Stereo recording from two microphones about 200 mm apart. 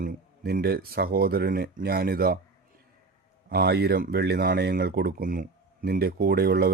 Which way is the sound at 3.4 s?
55° right (ahead or behind).